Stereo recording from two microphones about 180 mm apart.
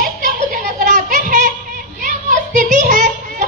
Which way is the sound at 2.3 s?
45° right (ahead or behind).